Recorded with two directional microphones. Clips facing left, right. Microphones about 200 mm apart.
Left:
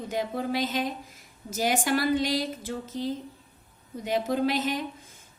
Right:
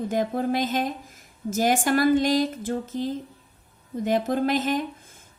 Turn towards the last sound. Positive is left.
turn(degrees=-50)  # may be behind; listen again after turning